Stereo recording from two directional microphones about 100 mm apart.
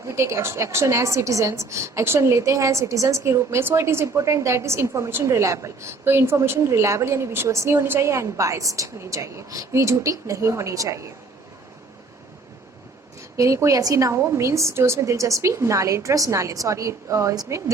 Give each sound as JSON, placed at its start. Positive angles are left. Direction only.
{"t": 0.1, "sound": "a woman's voice", "side_deg": -30}
{"t": 13.3, "sound": "a woman's voice", "side_deg": -30}